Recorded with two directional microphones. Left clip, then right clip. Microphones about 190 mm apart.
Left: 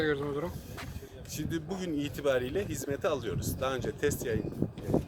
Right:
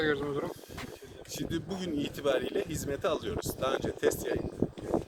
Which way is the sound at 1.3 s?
15° left (ahead or behind).